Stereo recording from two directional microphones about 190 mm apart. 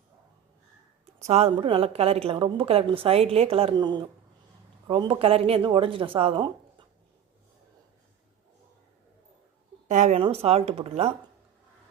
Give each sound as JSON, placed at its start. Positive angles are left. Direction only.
{"t": 1.3, "sound": "a woman's voice", "side_deg": -30}
{"t": 9.9, "sound": "speech", "side_deg": -40}